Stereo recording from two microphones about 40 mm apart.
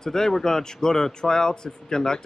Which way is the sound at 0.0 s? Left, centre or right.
Centre.